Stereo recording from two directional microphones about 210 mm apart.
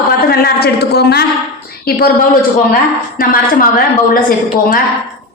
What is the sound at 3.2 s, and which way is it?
Speech, 40° left (ahead or behind).